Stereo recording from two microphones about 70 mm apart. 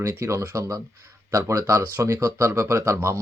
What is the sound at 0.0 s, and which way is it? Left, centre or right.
Speech, right.